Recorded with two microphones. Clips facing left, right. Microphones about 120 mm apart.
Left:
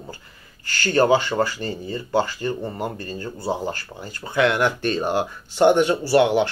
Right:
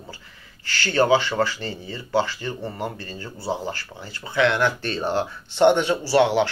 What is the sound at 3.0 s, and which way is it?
Speech, 45° left (ahead or behind).